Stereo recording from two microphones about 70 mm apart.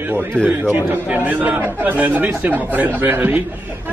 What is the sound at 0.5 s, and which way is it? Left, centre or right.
A man's voice, right.